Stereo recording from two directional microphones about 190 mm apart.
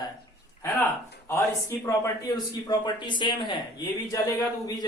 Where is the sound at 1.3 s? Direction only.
15° left (ahead or behind).